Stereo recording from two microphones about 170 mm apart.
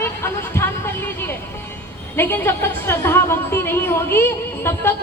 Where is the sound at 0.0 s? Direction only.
15° left (ahead or behind).